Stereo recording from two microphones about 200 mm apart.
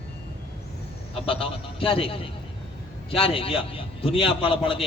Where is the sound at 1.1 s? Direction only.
25° left (ahead or behind).